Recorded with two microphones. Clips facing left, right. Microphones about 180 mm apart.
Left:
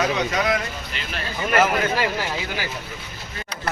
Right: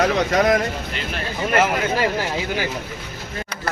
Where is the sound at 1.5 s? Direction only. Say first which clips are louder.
Even; 25° right (ahead or behind).